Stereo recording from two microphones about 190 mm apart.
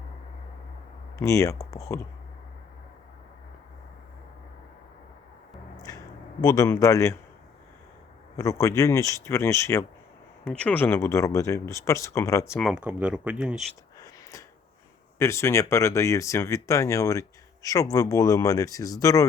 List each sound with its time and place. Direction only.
1.2 s speech: 15° left (ahead or behind)
6.4 s speech: 20° left (ahead or behind)
8.4 s speech: 15° left (ahead or behind)
12.5 s speech: centre (ahead or behind)
14.0 s a sound: 15° left (ahead or behind)
15.2 s speech: 15° left (ahead or behind)